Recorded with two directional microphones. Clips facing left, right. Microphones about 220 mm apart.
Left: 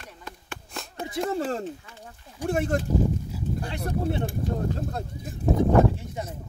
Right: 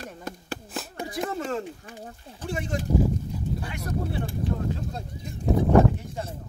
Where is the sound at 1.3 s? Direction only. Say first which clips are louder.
Left 4 dB; 35° left (ahead or behind).